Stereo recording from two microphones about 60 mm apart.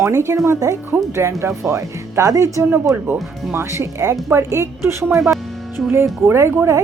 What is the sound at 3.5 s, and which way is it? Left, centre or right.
Speech, right.